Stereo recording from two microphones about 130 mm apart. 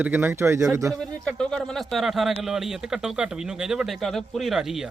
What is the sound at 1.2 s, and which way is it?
Speech, centre (ahead or behind).